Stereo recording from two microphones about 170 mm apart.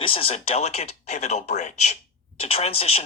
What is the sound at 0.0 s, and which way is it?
Speech, 35° left (ahead or behind).